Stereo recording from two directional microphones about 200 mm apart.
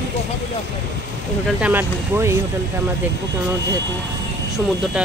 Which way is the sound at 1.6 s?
10° right (ahead or behind).